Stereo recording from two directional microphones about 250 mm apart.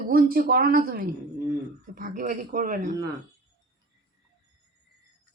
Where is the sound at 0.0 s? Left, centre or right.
Right.